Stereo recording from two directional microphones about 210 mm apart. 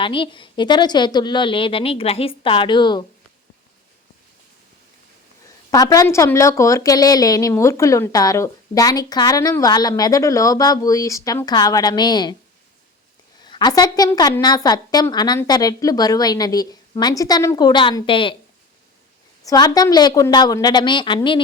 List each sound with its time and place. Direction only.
0.0 s a woman's voice: 25° left (ahead or behind)
5.7 s a woman's voice: 15° left (ahead or behind)
13.4 s a woman's voice: 20° left (ahead or behind)
19.5 s a woman's voice: 20° left (ahead or behind)